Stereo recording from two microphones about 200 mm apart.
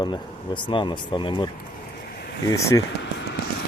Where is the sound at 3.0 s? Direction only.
60° left (ahead or behind).